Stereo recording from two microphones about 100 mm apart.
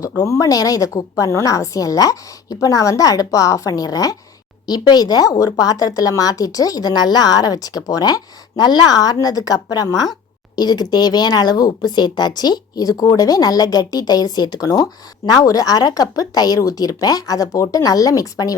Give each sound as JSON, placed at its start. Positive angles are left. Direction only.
{"t": 0.2, "sound": "speech", "side_deg": 35}